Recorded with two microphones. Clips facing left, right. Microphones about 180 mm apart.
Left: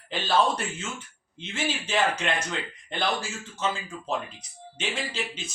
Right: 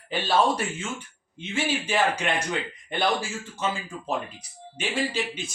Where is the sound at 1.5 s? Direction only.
10° right (ahead or behind).